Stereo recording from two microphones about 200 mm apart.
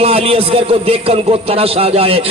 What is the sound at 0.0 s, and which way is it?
A man's voice, 30° right (ahead or behind).